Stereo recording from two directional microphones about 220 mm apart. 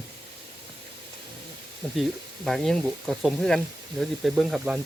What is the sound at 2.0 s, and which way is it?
Speech, centre (ahead or behind).